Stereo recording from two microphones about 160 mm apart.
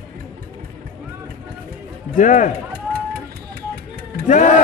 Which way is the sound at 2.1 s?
55° left (ahead or behind).